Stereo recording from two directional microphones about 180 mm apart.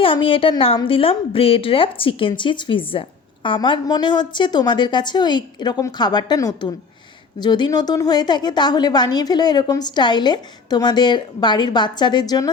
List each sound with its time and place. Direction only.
0.0 s a woman's voice: 30° left (ahead or behind)